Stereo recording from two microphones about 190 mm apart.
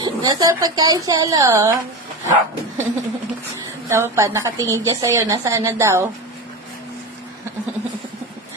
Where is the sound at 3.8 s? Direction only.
15° right (ahead or behind).